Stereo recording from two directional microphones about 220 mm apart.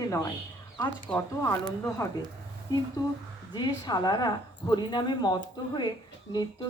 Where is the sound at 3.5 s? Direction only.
20° left (ahead or behind).